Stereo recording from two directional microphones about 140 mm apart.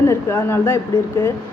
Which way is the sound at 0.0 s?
20° left (ahead or behind).